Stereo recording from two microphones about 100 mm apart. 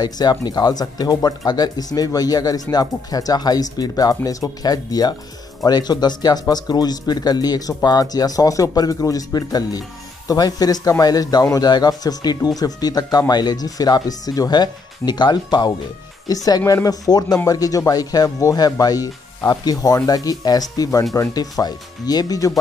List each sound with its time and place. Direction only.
0.0 s speech: 45° left (ahead or behind)